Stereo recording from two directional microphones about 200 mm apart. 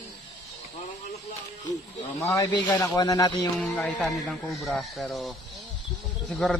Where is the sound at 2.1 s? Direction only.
10° left (ahead or behind).